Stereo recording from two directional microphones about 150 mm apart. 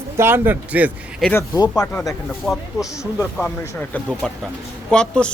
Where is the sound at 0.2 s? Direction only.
15° right (ahead or behind).